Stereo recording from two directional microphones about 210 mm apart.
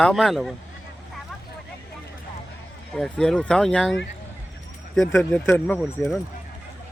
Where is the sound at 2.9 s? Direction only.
5° left (ahead or behind).